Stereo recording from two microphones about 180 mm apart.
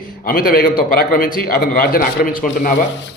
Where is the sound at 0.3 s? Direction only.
55° left (ahead or behind).